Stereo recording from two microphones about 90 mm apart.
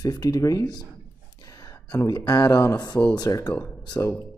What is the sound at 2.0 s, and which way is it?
Speech, 45° left (ahead or behind).